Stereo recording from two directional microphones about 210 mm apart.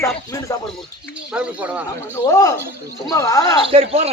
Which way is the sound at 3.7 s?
30° right (ahead or behind).